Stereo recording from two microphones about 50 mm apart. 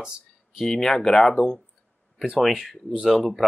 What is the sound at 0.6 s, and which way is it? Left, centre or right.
Speech, centre.